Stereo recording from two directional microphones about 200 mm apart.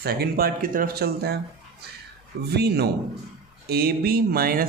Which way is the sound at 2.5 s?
55° right (ahead or behind).